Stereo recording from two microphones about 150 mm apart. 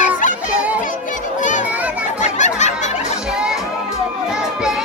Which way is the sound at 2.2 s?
50° left (ahead or behind).